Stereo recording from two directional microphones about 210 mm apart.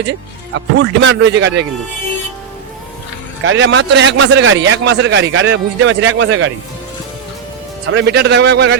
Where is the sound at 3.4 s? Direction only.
65° right (ahead or behind).